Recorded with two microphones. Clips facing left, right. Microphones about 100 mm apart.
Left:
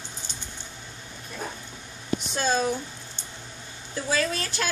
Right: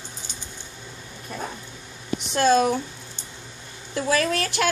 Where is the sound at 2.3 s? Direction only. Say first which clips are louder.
Right 7 dB; 70° right (ahead or behind).